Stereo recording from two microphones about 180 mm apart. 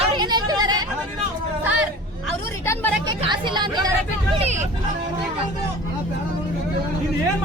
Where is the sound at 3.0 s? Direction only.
25° right (ahead or behind).